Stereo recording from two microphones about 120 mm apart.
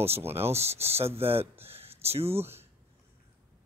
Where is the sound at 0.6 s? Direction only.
60° right (ahead or behind).